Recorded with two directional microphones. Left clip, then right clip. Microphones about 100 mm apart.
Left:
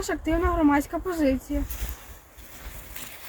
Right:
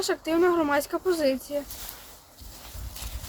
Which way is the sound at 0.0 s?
40° right (ahead or behind).